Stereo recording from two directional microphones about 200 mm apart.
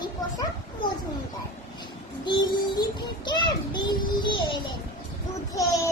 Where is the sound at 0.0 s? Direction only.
20° left (ahead or behind).